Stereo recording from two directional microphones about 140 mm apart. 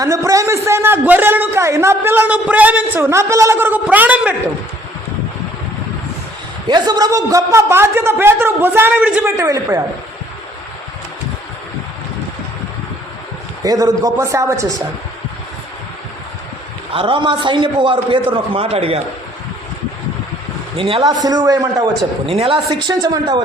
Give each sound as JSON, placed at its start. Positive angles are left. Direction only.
{"t": 0.0, "sound": "a man's voice", "side_deg": -25}
{"t": 6.7, "sound": "a man's voice", "side_deg": -30}
{"t": 9.3, "sound": "a man's voice", "side_deg": -25}
{"t": 13.6, "sound": "a man's voice", "side_deg": -25}
{"t": 16.9, "sound": "a man's voice", "side_deg": -40}
{"t": 20.7, "sound": "a man's voice", "side_deg": -40}
{"t": 21.2, "sound": "a man's voice", "side_deg": -25}
{"t": 22.3, "sound": "a woman's voice", "side_deg": -40}
{"t": 22.9, "sound": "a man's voice", "side_deg": -25}